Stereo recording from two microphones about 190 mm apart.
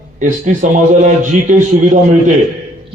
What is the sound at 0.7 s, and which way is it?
A man's voice, 40° right (ahead or behind).